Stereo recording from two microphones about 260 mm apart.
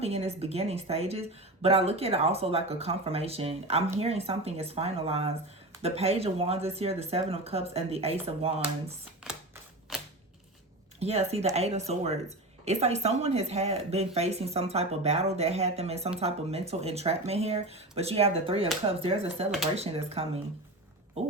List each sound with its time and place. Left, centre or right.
0.0 s speech: right
9.9 s a sound: centre
11.0 s speech: right